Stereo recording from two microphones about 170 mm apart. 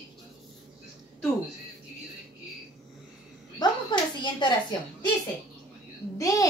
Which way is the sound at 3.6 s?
25° left (ahead or behind).